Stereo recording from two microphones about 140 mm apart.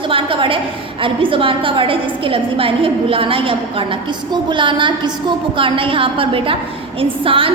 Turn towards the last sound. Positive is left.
turn(degrees=-40)  # may be behind; listen again after turning